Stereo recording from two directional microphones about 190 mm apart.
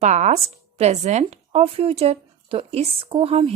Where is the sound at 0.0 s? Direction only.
40° right (ahead or behind).